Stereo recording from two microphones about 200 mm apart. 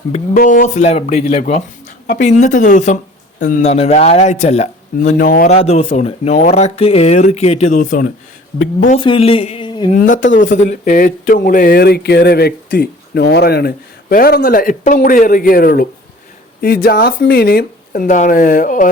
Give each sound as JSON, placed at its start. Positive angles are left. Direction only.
{"t": 0.3, "sound": "speech", "side_deg": 40}
{"t": 9.0, "sound": "a sound", "side_deg": 25}
{"t": 9.9, "sound": "speech", "side_deg": 40}